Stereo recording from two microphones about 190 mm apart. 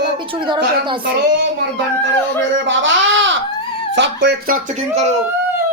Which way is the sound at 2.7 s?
80° right.